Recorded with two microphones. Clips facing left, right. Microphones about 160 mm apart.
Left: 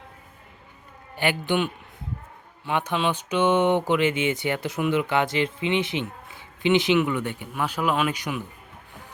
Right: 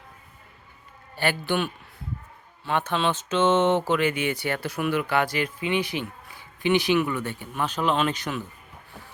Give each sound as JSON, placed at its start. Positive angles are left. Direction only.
{"t": 1.1, "sound": "speech", "side_deg": 15}